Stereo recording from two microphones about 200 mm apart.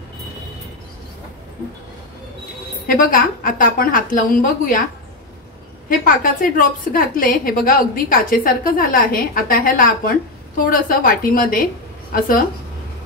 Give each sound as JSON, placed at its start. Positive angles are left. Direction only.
{"t": 2.9, "sound": "a woman's voice", "side_deg": 45}
{"t": 5.9, "sound": "a woman's voice", "side_deg": 45}